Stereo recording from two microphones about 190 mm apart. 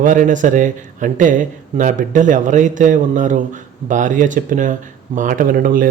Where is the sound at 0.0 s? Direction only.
45° right (ahead or behind).